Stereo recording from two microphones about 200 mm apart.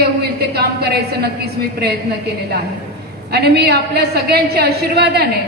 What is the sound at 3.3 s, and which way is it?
A woman's voice, 55° right (ahead or behind).